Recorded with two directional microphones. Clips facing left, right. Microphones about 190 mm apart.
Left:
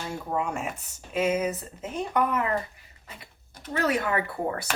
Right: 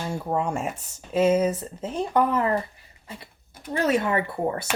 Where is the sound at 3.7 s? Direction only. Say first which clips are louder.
Right 3 dB; 30° right (ahead or behind).